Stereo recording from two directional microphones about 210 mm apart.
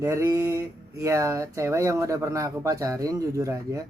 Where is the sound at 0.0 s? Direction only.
15° right (ahead or behind).